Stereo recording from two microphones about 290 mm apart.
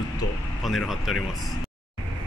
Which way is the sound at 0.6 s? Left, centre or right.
Centre.